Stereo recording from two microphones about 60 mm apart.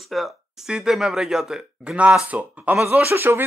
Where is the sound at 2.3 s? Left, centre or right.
Right.